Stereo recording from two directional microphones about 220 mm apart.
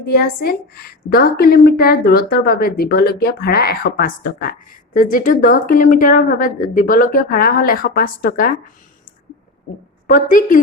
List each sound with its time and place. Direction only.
0.0 s a woman's voice: 45° left (ahead or behind)
10.1 s speech: 35° left (ahead or behind)